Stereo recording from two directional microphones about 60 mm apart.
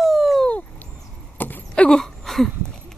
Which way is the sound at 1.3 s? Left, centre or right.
Left.